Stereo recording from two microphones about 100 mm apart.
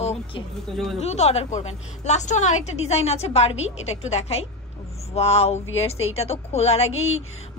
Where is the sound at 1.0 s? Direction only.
90° left.